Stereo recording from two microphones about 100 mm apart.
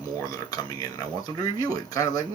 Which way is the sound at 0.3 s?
35° left (ahead or behind).